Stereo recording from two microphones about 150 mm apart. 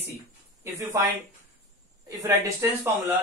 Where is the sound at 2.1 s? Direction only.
20° right (ahead or behind).